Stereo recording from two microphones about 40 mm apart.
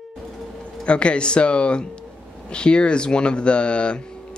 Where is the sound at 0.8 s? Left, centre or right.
Left.